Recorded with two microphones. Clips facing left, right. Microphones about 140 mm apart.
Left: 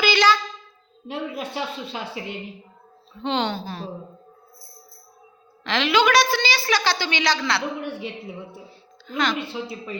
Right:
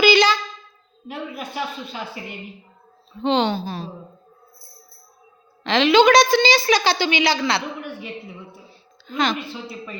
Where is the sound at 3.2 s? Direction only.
20° right (ahead or behind).